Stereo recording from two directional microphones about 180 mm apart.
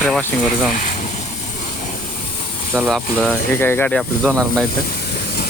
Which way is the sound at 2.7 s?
Centre (ahead or behind).